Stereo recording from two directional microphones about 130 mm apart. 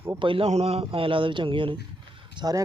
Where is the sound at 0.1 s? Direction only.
40° right (ahead or behind).